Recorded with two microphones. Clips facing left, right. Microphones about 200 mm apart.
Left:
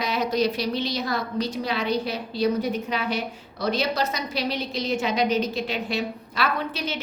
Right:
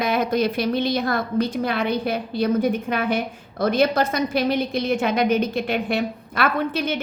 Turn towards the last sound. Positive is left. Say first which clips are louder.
# right 6 dB
turn(degrees=-55)  # may be behind; listen again after turning